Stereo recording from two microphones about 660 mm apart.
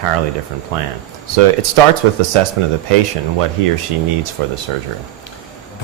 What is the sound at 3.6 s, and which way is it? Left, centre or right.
Speech, right.